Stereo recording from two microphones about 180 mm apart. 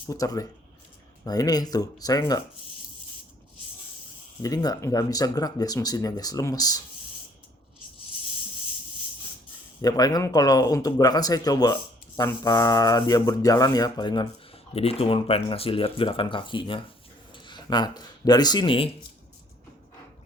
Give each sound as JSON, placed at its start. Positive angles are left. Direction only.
{"t": 0.1, "sound": "speech", "side_deg": 20}
{"t": 4.4, "sound": "speech", "side_deg": 20}
{"t": 9.8, "sound": "speech", "side_deg": 20}